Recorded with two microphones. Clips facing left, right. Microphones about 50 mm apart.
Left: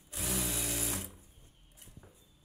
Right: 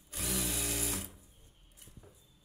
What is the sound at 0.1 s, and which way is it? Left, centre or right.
Sewing machine, centre.